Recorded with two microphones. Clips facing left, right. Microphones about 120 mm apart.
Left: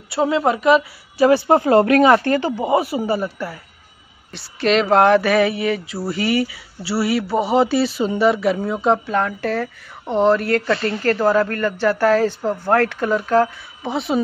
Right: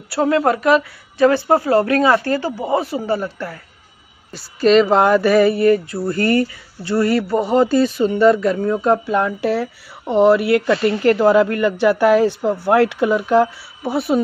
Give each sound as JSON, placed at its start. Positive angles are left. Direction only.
{"t": 0.1, "sound": "speech", "side_deg": 0}
{"t": 1.2, "sound": "speech", "side_deg": 15}
{"t": 4.6, "sound": "a woman's voice", "side_deg": 0}
{"t": 13.9, "sound": "speech", "side_deg": 0}